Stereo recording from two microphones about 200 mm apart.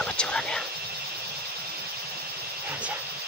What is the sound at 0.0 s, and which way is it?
Vehicle, 5° left (ahead or behind).